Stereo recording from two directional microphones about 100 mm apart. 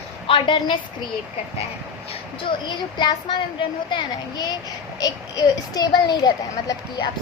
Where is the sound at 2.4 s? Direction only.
55° left (ahead or behind).